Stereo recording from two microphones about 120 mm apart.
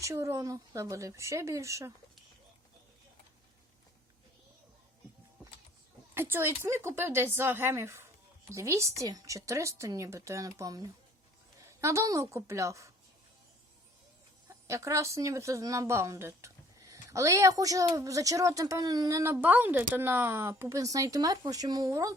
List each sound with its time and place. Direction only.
0.0 s speech: 25° right (ahead or behind)
6.1 s speech: 20° right (ahead or behind)
14.4 s speech: 25° right (ahead or behind)